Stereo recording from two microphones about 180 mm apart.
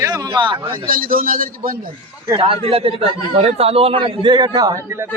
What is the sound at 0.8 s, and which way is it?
A man's voice, 50° right (ahead or behind).